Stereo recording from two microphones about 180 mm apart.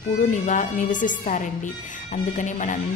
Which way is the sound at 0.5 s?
45° left (ahead or behind).